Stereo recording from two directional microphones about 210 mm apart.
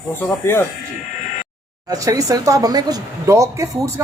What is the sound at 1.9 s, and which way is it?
A man's voice, 15° right (ahead or behind).